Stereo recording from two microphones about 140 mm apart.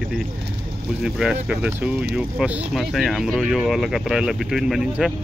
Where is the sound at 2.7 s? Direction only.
Centre (ahead or behind).